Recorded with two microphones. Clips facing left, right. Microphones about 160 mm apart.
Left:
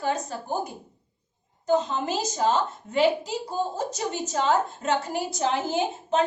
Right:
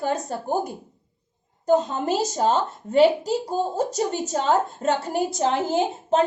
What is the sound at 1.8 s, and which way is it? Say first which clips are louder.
Speech: right 2 dB; 45° right (ahead or behind).